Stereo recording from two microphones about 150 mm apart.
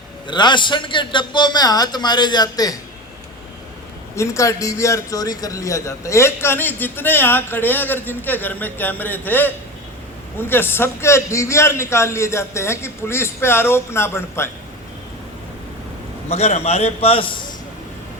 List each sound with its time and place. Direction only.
0.3 s a man's voice: 30° left (ahead or behind)
4.1 s a man's voice: 20° left (ahead or behind)
16.3 s a man's voice: 45° left (ahead or behind)